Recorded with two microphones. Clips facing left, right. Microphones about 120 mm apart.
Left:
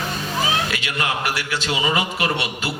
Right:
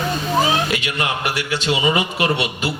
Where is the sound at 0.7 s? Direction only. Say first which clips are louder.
Right 2 dB; 20° right (ahead or behind).